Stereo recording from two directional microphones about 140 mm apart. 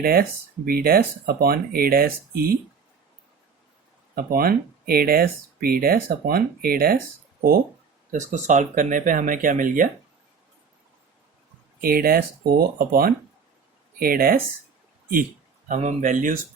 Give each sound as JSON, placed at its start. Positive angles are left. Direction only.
{"t": 0.0, "sound": "speech", "side_deg": -90}
{"t": 4.1, "sound": "speech", "side_deg": -90}
{"t": 8.1, "sound": "speech", "side_deg": -60}
{"t": 11.8, "sound": "speech", "side_deg": -90}
{"t": 15.7, "sound": "speech", "side_deg": -60}